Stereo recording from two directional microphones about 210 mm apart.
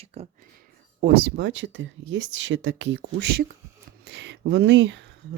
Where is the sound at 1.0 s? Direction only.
50° right (ahead or behind).